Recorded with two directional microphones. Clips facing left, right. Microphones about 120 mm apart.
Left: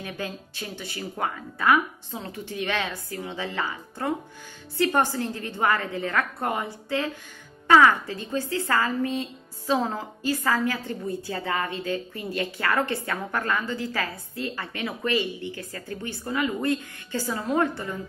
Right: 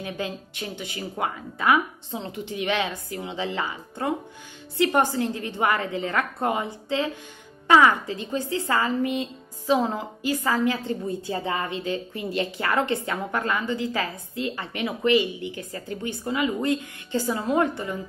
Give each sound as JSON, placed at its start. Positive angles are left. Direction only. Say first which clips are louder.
{"t": 0.0, "sound": "a woman's voice", "louder": "right 3 dB", "side_deg": -20}